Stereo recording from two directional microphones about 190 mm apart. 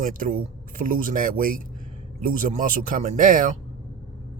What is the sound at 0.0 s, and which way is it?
Speech, 45° right (ahead or behind).